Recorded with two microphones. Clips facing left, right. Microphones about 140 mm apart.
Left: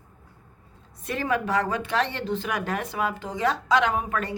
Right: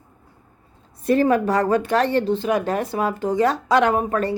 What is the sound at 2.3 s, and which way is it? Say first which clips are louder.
Speech: right 7 dB; 30° right (ahead or behind).